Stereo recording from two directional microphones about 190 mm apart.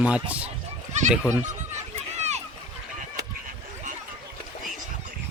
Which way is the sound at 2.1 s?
35° right (ahead or behind).